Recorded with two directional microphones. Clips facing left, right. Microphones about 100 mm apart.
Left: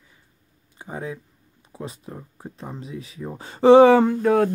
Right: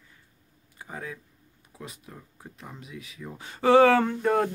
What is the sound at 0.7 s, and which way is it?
Speech, 25° left (ahead or behind).